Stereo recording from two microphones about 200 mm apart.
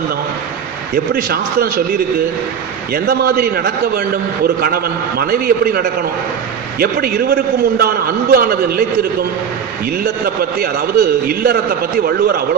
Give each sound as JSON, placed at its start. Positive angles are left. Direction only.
{"t": 0.9, "sound": "a man's voice", "side_deg": -50}
{"t": 10.0, "sound": "a man's voice", "side_deg": -50}